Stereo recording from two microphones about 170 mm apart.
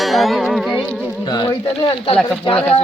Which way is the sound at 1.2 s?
25° left (ahead or behind).